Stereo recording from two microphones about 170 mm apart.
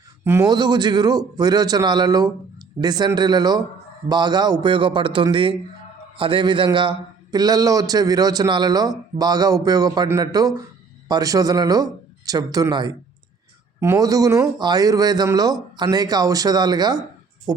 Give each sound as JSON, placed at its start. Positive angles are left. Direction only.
{"t": 0.3, "sound": "a man's voice", "side_deg": -20}